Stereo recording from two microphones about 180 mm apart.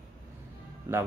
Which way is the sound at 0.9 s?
15° right (ahead or behind).